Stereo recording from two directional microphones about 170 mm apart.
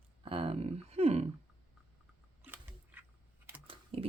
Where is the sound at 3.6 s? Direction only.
30° right (ahead or behind).